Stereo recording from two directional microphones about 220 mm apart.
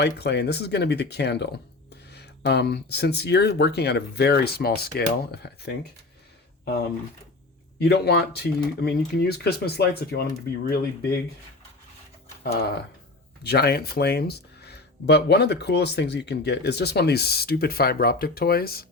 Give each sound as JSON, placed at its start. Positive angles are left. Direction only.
{"t": 0.0, "sound": "speech", "side_deg": 50}
{"t": 7.8, "sound": "speech", "side_deg": 45}
{"t": 12.4, "sound": "speech", "side_deg": 45}